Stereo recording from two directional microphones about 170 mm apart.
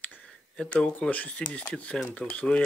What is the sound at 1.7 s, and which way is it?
Speech, 5° left (ahead or behind).